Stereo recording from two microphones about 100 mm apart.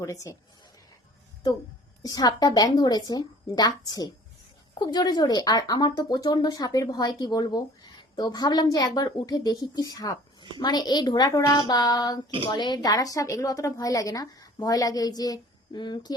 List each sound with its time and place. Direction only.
0.0 s speech: 30° left (ahead or behind)
2.0 s a woman's voice: 40° left (ahead or behind)